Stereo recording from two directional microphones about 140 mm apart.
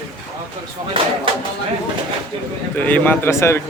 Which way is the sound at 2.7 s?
10° left (ahead or behind).